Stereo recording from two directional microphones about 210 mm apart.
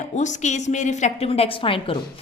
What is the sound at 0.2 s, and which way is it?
A woman's voice, 35° left (ahead or behind).